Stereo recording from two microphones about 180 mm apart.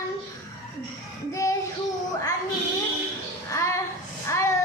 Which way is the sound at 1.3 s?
20° left (ahead or behind).